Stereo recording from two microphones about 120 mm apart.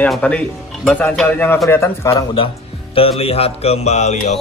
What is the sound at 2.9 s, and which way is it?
Music, 50° left (ahead or behind).